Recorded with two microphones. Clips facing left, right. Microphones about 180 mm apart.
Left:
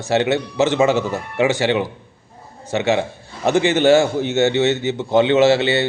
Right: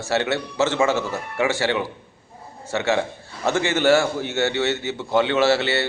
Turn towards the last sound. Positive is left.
turn(degrees=20)  # may be behind; listen again after turning